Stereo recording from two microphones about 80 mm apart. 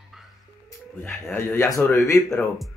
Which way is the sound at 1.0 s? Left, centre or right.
Left.